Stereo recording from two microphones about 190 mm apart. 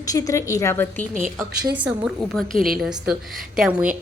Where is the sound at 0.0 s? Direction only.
20° left (ahead or behind).